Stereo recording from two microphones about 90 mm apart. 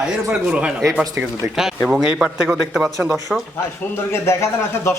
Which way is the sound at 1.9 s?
10° right (ahead or behind).